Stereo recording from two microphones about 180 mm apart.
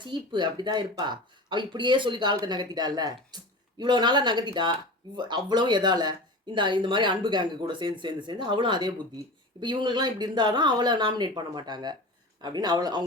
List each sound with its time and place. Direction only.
0.0 s speech: 25° right (ahead or behind)